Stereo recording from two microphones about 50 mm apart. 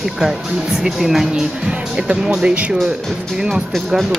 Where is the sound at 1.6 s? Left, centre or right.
Centre.